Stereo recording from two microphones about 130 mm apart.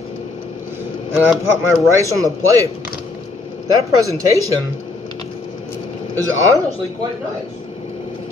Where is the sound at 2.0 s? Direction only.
25° right (ahead or behind).